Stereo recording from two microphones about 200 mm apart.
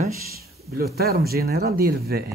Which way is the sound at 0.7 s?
50° right (ahead or behind).